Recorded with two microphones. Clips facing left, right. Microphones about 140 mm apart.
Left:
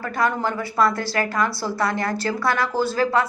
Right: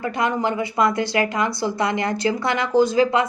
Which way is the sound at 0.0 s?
20° right (ahead or behind).